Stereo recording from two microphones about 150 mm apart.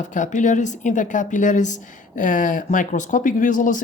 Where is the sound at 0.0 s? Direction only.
55° left (ahead or behind).